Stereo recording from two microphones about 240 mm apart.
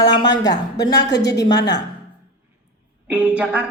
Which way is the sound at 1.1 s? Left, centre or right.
Left.